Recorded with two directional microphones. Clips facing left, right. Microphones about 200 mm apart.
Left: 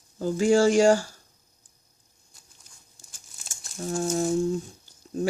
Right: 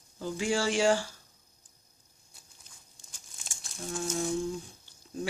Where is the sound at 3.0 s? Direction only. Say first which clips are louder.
Even; 5° left (ahead or behind).